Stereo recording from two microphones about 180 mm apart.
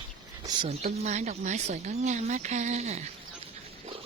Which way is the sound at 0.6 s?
35° right (ahead or behind).